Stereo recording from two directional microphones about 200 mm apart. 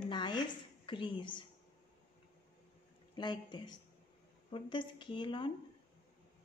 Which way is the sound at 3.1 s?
20° left (ahead or behind).